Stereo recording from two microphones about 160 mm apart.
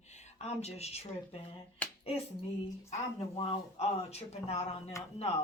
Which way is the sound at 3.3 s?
35° left (ahead or behind).